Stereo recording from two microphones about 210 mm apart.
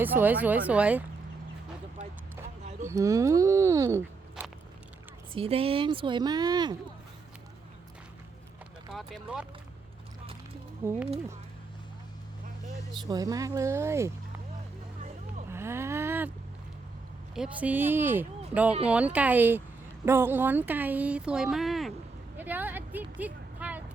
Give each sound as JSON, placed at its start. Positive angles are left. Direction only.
{"t": 0.0, "sound": "speech", "side_deg": -10}
{"t": 2.8, "sound": "speech", "side_deg": -15}
{"t": 5.3, "sound": "speech", "side_deg": -25}
{"t": 8.9, "sound": "speech", "side_deg": 0}
{"t": 10.8, "sound": "speech", "side_deg": -10}
{"t": 13.0, "sound": "speech", "side_deg": -15}
{"t": 15.4, "sound": "a sound", "side_deg": -10}
{"t": 17.3, "sound": "speech", "side_deg": -5}
{"t": 22.4, "sound": "a sound", "side_deg": -10}